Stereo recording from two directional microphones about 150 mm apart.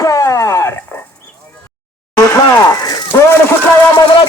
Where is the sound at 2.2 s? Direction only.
20° left (ahead or behind).